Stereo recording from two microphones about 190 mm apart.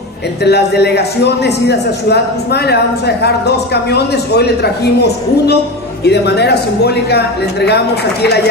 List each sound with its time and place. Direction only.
0.4 s a man's voice: 60° left (ahead or behind)